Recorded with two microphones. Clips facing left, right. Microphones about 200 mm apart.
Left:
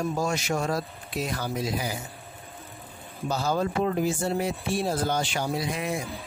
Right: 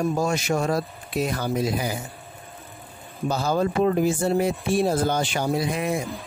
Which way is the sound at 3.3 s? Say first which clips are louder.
Right 3 dB; 55° right (ahead or behind).